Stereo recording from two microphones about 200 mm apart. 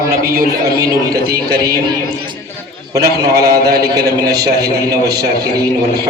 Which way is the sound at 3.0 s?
50° right (ahead or behind).